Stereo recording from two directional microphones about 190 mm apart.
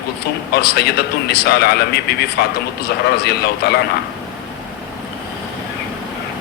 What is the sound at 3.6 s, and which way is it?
Speech, 55° left (ahead or behind).